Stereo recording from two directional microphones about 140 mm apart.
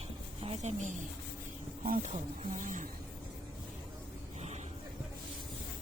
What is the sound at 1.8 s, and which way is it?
Speech, 75° right (ahead or behind).